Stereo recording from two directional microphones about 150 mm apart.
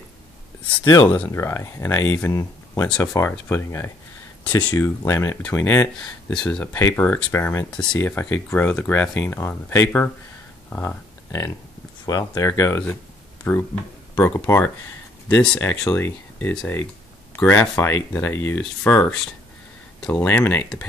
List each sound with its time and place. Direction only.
0.7 s speech: 30° left (ahead or behind)
1.1 s speech: 15° left (ahead or behind)
5.9 s speech: 5° left (ahead or behind)
17.7 s speech: 20° left (ahead or behind)